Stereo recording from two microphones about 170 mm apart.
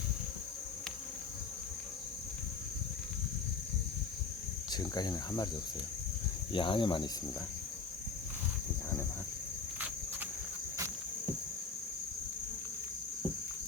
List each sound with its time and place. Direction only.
4.7 s speech: 25° left (ahead or behind)
6.5 s speech: 30° left (ahead or behind)